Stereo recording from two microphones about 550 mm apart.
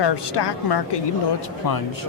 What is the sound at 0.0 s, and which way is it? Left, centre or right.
Speech, left.